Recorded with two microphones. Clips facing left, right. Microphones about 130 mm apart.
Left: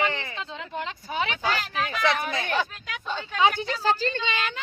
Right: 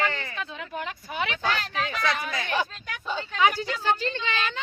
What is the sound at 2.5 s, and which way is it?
Speech, 10° right (ahead or behind).